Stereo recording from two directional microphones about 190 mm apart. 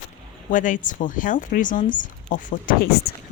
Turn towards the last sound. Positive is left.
turn(degrees=50)  # may be behind; listen again after turning